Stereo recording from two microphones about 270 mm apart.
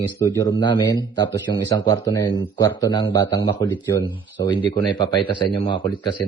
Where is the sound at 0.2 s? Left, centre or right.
Centre.